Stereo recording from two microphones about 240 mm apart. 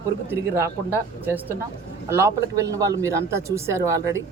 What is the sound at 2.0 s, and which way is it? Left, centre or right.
Speech, centre.